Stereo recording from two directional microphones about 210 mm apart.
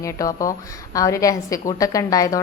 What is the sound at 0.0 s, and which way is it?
A woman's voice, 15° left (ahead or behind).